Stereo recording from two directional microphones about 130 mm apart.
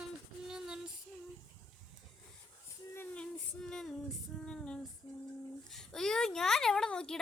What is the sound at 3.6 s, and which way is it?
Female singing, 5° left (ahead or behind).